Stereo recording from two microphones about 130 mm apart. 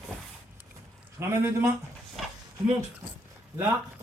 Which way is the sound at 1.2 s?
20° right (ahead or behind).